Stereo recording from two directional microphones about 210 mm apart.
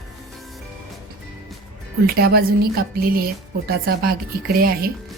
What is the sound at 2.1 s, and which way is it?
A woman's voice, 45° right (ahead or behind).